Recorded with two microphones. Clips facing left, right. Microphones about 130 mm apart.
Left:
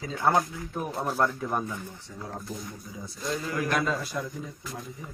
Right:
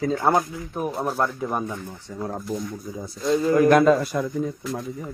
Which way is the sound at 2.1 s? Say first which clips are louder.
Right 12 dB; 60° right (ahead or behind).